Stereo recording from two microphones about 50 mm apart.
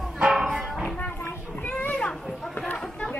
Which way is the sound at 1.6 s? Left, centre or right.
Left.